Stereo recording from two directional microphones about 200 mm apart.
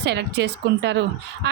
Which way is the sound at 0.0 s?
55° right (ahead or behind).